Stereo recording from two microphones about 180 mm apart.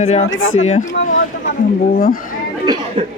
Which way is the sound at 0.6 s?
40° left (ahead or behind).